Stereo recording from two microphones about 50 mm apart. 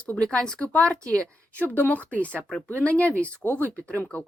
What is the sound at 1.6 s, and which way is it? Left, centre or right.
A woman's voice, left.